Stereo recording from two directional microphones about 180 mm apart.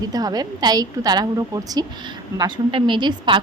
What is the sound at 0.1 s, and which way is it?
Speech, 20° right (ahead or behind).